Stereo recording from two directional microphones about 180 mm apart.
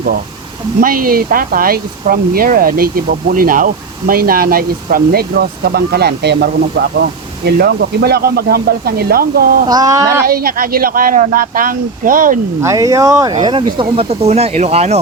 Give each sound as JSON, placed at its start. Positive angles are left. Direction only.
{"t": 0.8, "sound": "speech", "side_deg": -50}
{"t": 9.6, "sound": "speech", "side_deg": -20}
{"t": 10.2, "sound": "speech", "side_deg": -55}
{"t": 12.6, "sound": "speech", "side_deg": -20}